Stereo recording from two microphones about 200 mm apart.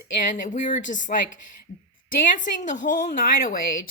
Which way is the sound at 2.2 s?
40° left (ahead or behind).